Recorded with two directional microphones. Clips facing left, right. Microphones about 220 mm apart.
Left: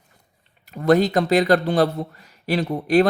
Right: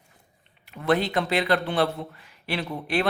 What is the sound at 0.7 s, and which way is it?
Speech, 40° left (ahead or behind).